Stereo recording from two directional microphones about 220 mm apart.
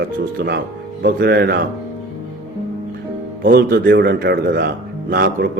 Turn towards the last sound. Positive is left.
turn(degrees=-45)  # may be behind; listen again after turning